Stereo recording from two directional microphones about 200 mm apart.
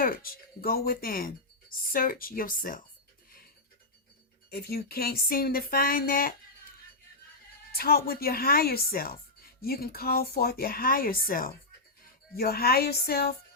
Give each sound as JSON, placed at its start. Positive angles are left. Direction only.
{"t": 0.0, "sound": "speech", "side_deg": 45}
{"t": 4.5, "sound": "speech", "side_deg": 50}
{"t": 7.7, "sound": "speech", "side_deg": 50}